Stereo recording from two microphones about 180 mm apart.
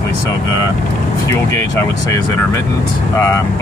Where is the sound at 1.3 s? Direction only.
15° left (ahead or behind).